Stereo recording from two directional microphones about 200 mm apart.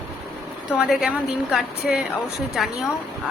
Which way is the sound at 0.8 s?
5° right (ahead or behind).